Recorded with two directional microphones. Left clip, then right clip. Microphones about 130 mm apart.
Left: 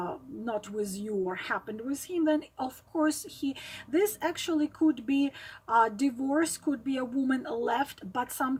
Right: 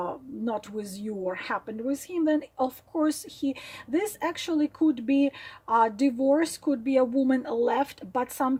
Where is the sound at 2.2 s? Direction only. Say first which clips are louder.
Right 3 dB; 45° right (ahead or behind).